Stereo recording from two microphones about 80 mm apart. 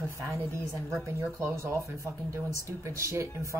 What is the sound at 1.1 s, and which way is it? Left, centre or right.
Speech, right.